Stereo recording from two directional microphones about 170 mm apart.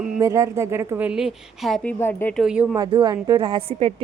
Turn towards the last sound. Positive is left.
turn(degrees=-35)  # may be behind; listen again after turning